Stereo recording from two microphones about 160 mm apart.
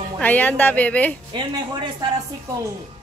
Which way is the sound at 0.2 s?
10° left (ahead or behind).